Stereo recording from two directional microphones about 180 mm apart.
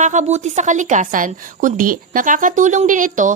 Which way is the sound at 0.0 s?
45° right (ahead or behind).